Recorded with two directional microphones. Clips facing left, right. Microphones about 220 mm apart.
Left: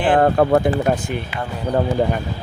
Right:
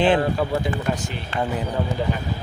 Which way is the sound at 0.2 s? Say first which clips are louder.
Left 8 dB; 55° left (ahead or behind).